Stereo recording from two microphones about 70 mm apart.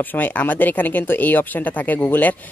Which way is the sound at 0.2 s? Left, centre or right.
Left.